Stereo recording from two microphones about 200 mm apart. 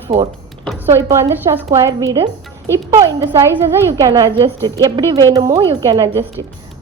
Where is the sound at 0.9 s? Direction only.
15° right (ahead or behind); by 6.4 s 30° right (ahead or behind).